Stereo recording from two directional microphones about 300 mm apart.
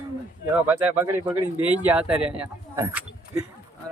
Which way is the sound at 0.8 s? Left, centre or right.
Centre.